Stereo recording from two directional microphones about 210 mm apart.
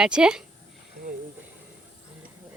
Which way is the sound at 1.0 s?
50° right (ahead or behind).